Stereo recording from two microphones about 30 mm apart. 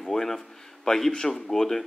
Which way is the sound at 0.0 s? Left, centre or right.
Centre.